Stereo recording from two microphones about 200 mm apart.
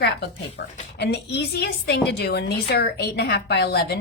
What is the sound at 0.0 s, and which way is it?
A woman's voice, 60° left (ahead or behind).